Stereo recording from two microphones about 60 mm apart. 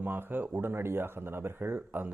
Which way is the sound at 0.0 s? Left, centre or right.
Right.